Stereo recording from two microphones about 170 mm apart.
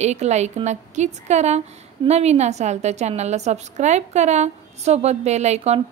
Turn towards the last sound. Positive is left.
turn(degrees=-40)  # may be behind; listen again after turning